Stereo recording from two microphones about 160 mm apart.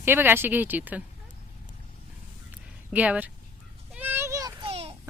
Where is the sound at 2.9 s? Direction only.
10° right (ahead or behind).